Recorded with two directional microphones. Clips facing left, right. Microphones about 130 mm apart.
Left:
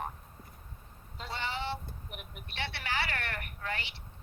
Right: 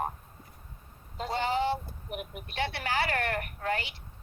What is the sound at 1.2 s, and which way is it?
A woman's voice, 45° right (ahead or behind).